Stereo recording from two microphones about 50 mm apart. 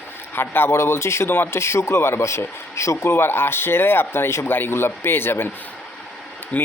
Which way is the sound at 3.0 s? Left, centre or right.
Left.